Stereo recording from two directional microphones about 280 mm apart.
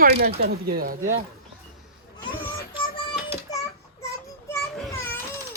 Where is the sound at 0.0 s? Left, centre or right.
Right.